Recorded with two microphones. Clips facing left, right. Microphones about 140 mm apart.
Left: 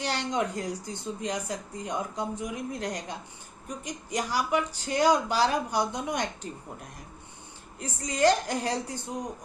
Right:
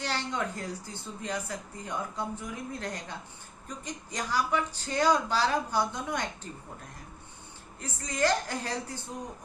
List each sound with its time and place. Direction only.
0.0 s a woman's voice: 15° left (ahead or behind)
7.8 s a woman's voice: 15° left (ahead or behind)